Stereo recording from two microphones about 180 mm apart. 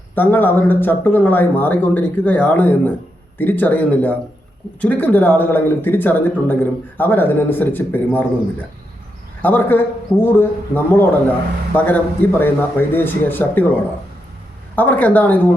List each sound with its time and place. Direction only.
0.2 s speech: 10° left (ahead or behind)
9.4 s speech: 10° left (ahead or behind)
14.8 s speech: 10° left (ahead or behind)